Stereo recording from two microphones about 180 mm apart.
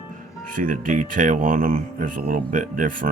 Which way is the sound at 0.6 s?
50° right (ahead or behind).